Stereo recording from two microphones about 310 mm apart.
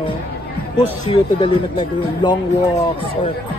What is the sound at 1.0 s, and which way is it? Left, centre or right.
Speech, centre.